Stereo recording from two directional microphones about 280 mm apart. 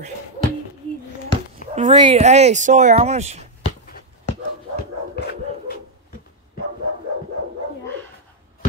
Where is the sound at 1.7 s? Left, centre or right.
Right.